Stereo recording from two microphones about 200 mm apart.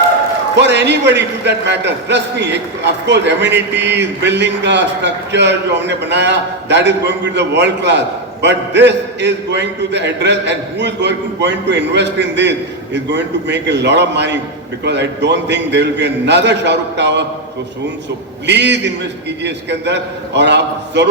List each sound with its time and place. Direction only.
0.6 s a man's voice: 60° right (ahead or behind)
18.4 s a man's voice: 60° right (ahead or behind)